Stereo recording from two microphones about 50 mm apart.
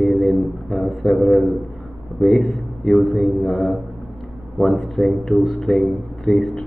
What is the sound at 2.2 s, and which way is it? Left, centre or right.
Speech, centre.